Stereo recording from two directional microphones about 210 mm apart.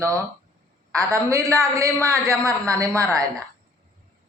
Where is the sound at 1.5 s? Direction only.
15° right (ahead or behind).